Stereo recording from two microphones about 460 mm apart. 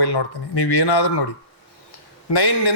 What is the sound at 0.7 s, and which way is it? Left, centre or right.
Speech, left.